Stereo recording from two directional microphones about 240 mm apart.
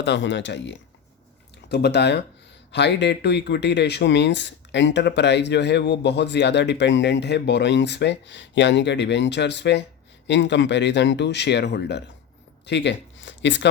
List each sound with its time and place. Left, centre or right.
0.0 s speech: left